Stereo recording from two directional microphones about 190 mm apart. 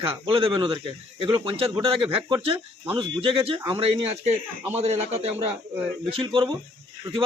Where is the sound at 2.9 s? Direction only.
30° right (ahead or behind).